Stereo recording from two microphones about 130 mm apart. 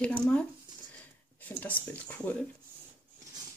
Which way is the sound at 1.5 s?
15° left (ahead or behind).